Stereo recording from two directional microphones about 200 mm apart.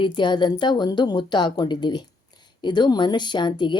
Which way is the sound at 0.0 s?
25° left (ahead or behind).